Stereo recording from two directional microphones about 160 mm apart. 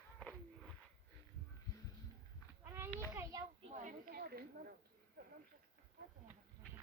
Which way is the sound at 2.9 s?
15° left (ahead or behind).